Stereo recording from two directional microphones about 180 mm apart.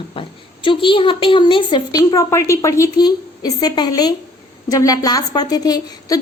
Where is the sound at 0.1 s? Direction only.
30° left (ahead or behind).